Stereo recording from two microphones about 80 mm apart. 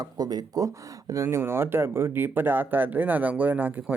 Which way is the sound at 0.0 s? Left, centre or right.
Right.